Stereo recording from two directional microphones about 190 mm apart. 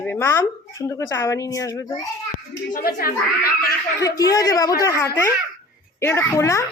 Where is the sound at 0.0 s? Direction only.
10° left (ahead or behind).